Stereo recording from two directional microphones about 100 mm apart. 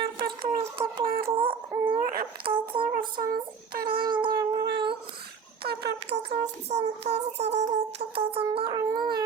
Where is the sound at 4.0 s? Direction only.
55° right (ahead or behind).